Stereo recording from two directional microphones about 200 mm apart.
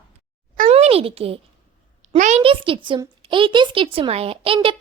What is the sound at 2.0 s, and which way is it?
Speech, 35° right (ahead or behind).